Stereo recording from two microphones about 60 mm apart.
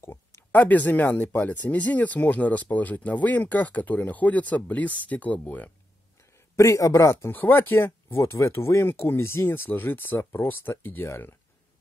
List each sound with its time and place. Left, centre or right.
0.0 s a sound: left
0.5 s speech: left
6.5 s speech: left
7.2 s speech: left